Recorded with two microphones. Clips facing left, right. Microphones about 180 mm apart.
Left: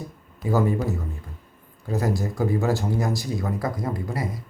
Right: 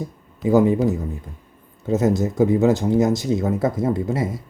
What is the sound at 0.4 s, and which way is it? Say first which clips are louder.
Speech: right 7 dB; 20° right (ahead or behind).